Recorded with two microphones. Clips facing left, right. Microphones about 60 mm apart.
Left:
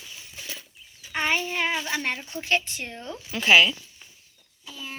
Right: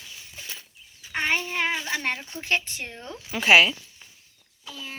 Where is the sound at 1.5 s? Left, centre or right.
Right.